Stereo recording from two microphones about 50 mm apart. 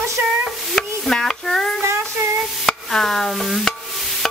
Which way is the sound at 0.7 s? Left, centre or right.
Centre.